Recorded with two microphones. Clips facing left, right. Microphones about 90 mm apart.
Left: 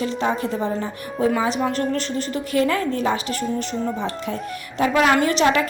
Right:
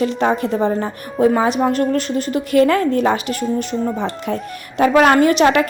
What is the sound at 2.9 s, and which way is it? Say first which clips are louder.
Speech: right 6 dB; 55° right (ahead or behind).